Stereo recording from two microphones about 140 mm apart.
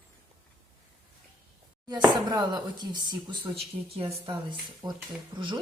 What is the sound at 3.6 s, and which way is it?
Speech, 45° right (ahead or behind).